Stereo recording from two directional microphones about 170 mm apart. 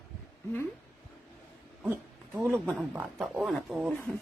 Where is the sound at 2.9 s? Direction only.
5° right (ahead or behind).